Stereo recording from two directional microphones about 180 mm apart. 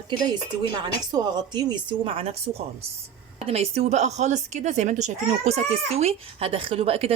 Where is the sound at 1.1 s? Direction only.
25° right (ahead or behind).